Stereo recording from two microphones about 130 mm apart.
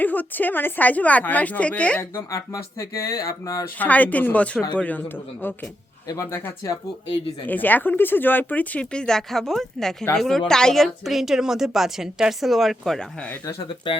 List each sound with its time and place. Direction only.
0.0 s speech: 15° left (ahead or behind)
2.3 s speech: 25° left (ahead or behind)
3.8 s a woman's voice: 10° left (ahead or behind)